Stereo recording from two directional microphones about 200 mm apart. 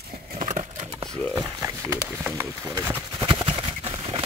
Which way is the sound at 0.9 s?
20° right (ahead or behind).